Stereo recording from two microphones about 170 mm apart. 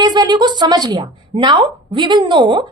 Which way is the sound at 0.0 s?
25° right (ahead or behind).